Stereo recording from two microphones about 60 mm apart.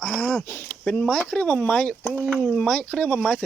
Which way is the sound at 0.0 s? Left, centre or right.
Centre.